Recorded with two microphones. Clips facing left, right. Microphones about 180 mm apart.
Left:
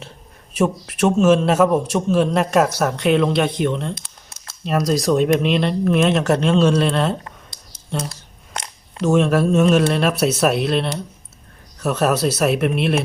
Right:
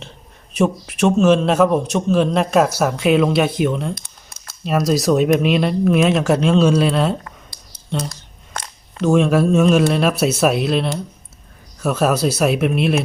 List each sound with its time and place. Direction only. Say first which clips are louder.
0.5 s a man's voice: right 1 dB; 5° left (ahead or behind)